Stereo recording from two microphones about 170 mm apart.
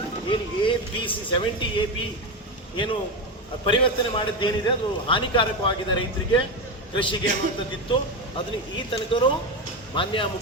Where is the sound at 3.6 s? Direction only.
30° left (ahead or behind).